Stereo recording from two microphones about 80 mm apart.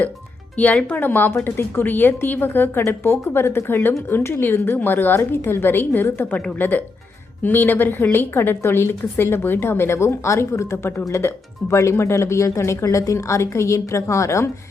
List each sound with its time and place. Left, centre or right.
0.5 s a woman's voice: centre; by 14.5 s left